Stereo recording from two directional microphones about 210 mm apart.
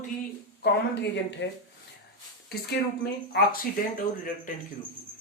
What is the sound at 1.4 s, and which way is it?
Speech, 60° left (ahead or behind).